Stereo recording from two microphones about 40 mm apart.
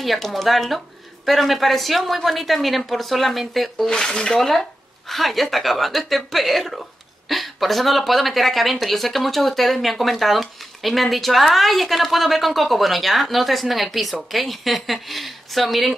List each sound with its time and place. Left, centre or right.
0.0 s speech: centre
3.9 s speech: centre